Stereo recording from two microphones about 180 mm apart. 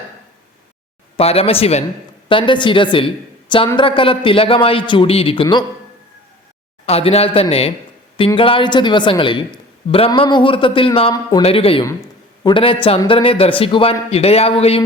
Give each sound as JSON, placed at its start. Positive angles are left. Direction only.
{"t": 1.1, "sound": "speech", "side_deg": 35}
{"t": 6.8, "sound": "speech", "side_deg": 35}
{"t": 11.4, "sound": "speech", "side_deg": 30}